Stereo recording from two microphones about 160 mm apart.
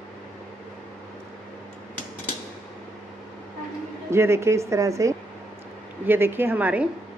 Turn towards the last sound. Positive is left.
turn(degrees=-10)  # may be behind; listen again after turning